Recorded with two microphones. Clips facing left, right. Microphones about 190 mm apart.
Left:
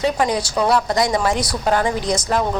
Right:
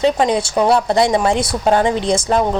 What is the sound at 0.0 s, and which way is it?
Speech, 25° right (ahead or behind).